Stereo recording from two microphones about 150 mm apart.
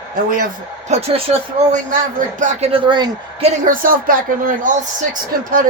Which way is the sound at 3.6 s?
65° right (ahead or behind).